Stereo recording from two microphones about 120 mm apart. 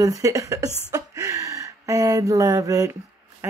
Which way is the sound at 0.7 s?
20° left (ahead or behind).